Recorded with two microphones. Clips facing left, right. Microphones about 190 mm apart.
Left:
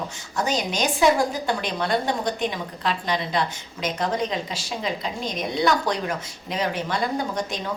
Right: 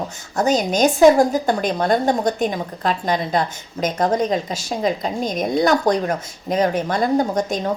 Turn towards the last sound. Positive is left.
turn(degrees=-45)  # may be behind; listen again after turning